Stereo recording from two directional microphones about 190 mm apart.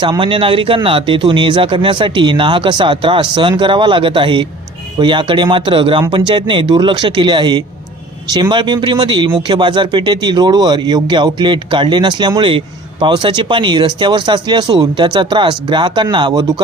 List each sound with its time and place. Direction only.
0.0 s speech: 25° right (ahead or behind)